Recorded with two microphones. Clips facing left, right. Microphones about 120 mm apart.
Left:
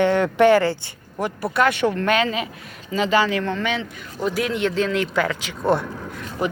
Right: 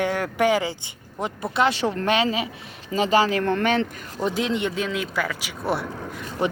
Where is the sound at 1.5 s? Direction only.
25° right (ahead or behind); by 3.9 s 55° right (ahead or behind).